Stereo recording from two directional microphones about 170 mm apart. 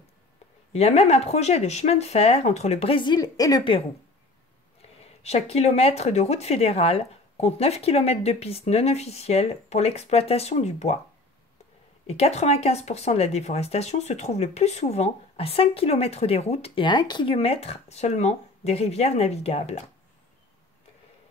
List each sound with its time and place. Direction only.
0.7 s speech: 40° left (ahead or behind)
5.2 s speech: 40° left (ahead or behind)
12.1 s speech: 40° left (ahead or behind)